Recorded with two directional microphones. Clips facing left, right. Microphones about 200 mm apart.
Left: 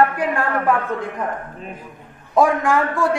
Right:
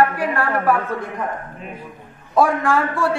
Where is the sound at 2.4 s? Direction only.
15° left (ahead or behind).